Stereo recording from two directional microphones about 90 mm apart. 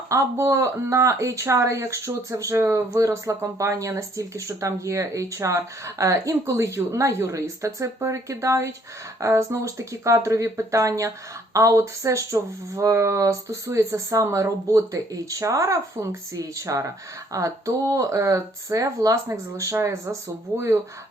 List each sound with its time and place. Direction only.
0.1 s speech: 35° right (ahead or behind)